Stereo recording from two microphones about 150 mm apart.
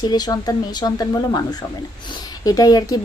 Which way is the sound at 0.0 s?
25° left (ahead or behind).